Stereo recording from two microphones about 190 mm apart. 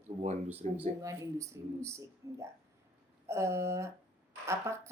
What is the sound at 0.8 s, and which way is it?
A woman's voice, 15° right (ahead or behind).